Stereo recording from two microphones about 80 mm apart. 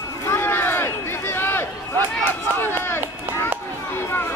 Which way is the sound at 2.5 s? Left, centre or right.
Left.